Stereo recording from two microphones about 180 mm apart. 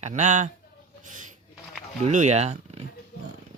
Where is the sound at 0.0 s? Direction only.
40° right (ahead or behind).